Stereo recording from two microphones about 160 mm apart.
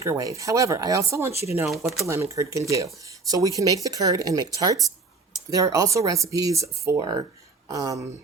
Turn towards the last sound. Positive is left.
turn(degrees=-20)  # may be behind; listen again after turning